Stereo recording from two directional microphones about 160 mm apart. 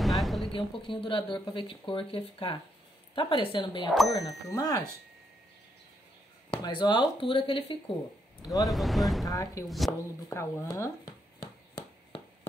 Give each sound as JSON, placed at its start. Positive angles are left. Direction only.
{"t": 0.0, "sound": "a sound", "side_deg": 0}
{"t": 0.5, "sound": "a woman's voice", "side_deg": 30}
{"t": 6.6, "sound": "speech", "side_deg": 30}
{"t": 8.6, "sound": "speech", "side_deg": 0}
{"t": 9.3, "sound": "a woman's voice", "side_deg": 20}
{"t": 9.7, "sound": "speech", "side_deg": 0}
{"t": 10.3, "sound": "speech", "side_deg": 15}